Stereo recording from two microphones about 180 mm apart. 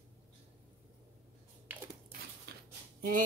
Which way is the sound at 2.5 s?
65° right (ahead or behind).